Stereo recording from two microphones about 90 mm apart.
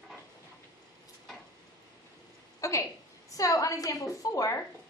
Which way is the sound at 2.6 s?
35° left (ahead or behind).